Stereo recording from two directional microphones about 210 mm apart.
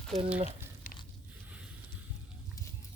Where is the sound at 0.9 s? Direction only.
40° left (ahead or behind).